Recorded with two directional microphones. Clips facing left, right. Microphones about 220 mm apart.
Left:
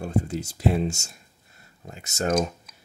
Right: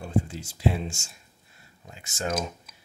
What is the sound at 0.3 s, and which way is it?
Speech, 40° left (ahead or behind).